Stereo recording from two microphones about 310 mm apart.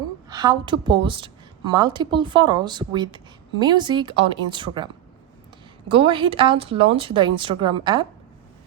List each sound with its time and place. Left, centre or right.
0.3 s a woman's voice: centre
5.9 s a woman's voice: centre